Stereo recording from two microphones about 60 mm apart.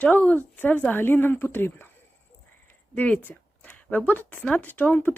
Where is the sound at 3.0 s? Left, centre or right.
Left.